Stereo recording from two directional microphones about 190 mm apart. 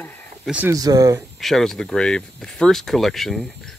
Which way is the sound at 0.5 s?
15° right (ahead or behind).